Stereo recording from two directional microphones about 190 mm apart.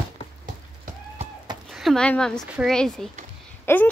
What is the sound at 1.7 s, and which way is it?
Speech, centre (ahead or behind).